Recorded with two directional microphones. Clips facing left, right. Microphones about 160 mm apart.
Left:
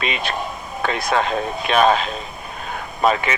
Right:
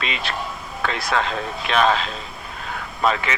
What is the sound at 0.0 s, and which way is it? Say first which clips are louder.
Speech: left 3 dB; 20° left (ahead or behind).